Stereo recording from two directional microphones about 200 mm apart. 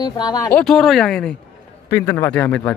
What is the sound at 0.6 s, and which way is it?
A man's voice, centre (ahead or behind).